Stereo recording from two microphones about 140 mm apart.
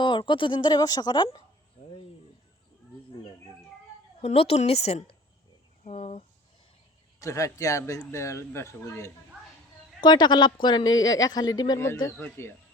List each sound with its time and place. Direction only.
0.0 s speech: 35° left (ahead or behind)
4.2 s a woman's voice: 50° left (ahead or behind)
5.8 s a sound: 50° left (ahead or behind)
7.2 s speech: 20° left (ahead or behind)
10.0 s speech: 30° left (ahead or behind)
12.1 s speech: 10° left (ahead or behind)